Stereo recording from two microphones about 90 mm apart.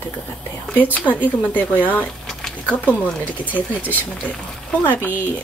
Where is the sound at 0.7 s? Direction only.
20° left (ahead or behind).